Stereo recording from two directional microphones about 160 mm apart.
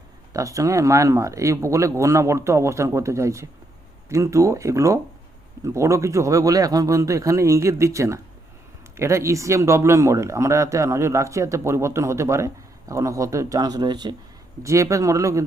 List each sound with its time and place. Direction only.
0.3 s speech: 20° right (ahead or behind)